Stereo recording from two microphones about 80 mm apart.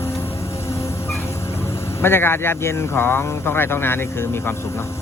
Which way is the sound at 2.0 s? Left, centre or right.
Left.